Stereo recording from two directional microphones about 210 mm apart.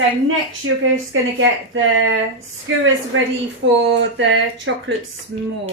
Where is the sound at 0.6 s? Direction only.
70° right (ahead or behind).